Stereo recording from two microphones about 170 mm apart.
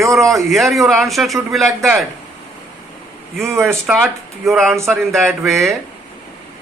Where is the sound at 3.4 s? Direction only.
15° right (ahead or behind).